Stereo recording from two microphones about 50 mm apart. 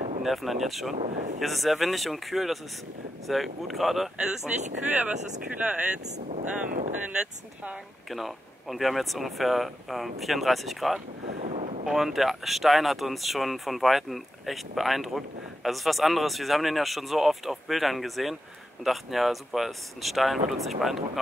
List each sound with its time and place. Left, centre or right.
0.2 s speech: centre
4.5 s speech: right
8.1 s speech: centre